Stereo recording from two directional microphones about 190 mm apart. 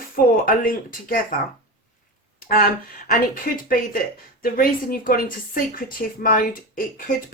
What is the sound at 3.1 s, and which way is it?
Speech, 50° left (ahead or behind).